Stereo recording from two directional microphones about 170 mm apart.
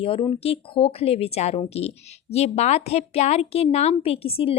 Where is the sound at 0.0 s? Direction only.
30° left (ahead or behind).